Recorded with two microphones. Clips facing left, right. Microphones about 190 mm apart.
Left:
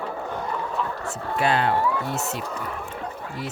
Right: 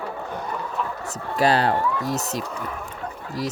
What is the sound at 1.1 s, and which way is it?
Speech, 35° right (ahead or behind).